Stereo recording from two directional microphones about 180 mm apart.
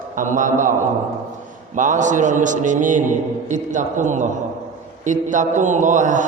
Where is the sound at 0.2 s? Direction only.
45° right (ahead or behind).